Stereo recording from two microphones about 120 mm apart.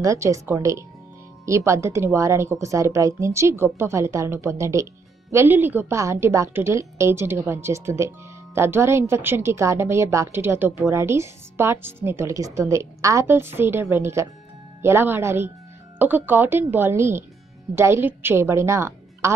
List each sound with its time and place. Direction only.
0.0 s a woman's voice: 25° right (ahead or behind)